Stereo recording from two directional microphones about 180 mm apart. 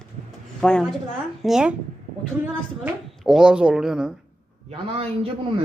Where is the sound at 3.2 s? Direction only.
5° right (ahead or behind).